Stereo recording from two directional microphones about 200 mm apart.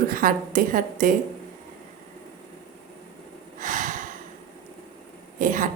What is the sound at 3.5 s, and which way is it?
Snort, 40° right (ahead or behind).